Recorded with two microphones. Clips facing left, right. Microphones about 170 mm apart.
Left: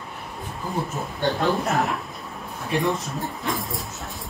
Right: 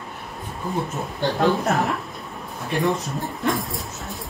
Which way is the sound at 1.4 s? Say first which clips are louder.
Right 4 dB; centre (ahead or behind).